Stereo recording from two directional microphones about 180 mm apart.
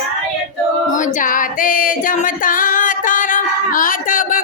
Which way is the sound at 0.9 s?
45° left (ahead or behind).